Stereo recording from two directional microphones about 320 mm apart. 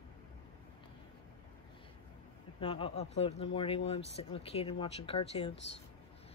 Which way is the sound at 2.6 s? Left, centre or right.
Centre.